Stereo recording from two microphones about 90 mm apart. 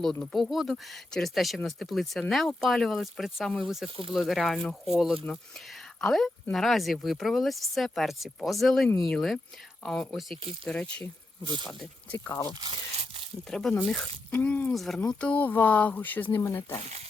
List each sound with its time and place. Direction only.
0.0 s speech: 5° left (ahead or behind)
11.4 s speech: 55° right (ahead or behind)
12.1 s speech: 25° left (ahead or behind)
13.5 s speech: 5° left (ahead or behind)
14.3 s speech: 20° left (ahead or behind)
14.7 s speech: 5° left (ahead or behind); by 16.4 s 20° left (ahead or behind)
16.4 s speech: 30° left (ahead or behind)